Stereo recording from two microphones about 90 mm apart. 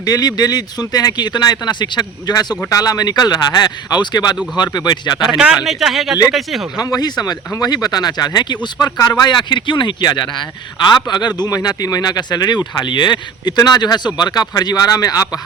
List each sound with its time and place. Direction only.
0.0 s speech: 45° left (ahead or behind)
5.6 s speech: centre (ahead or behind)
6.7 s speech: 45° left (ahead or behind)